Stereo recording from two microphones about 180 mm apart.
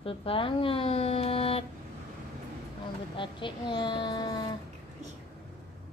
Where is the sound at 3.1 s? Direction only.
25° left (ahead or behind).